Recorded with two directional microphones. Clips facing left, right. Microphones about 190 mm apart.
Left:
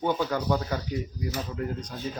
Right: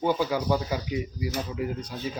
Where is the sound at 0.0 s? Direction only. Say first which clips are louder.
Right 2 dB; 5° right (ahead or behind).